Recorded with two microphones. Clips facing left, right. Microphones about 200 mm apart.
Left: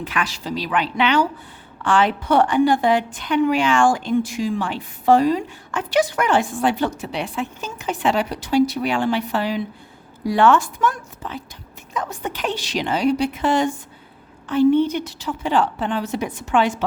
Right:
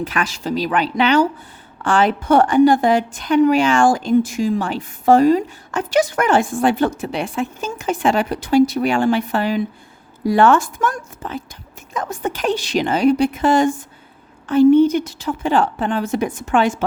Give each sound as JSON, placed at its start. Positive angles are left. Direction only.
{"t": 0.0, "sound": "a woman's voice", "side_deg": -40}